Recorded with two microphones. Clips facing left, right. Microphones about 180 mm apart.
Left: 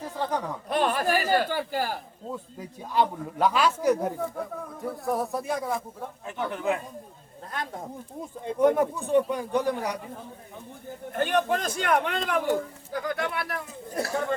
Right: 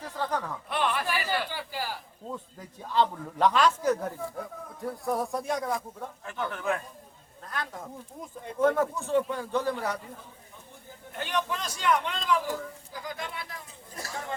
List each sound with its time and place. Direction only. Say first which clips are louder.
0.2 s a man's voice: left 2 dB; 15° left (ahead or behind)
0.7 s a sound: left 5 dB; 40° left (ahead or behind)
2.3 s a man's voice: left 3 dB; 10° left (ahead or behind)
6.2 s a man's voice: left 3 dB; 20° left (ahead or behind)
8.4 s a man's voice: left 3 dB; 15° left (ahead or behind)
11.1 s a man's voice: left 7 dB; 50° left (ahead or behind)